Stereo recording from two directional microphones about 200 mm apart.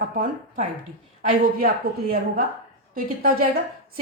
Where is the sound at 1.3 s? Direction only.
45° right (ahead or behind).